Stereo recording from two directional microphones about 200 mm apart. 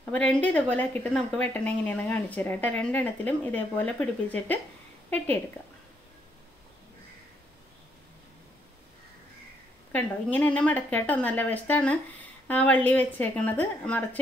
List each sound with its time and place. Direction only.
0.1 s a woman's voice: 5° left (ahead or behind)
9.9 s a woman's voice: 10° left (ahead or behind)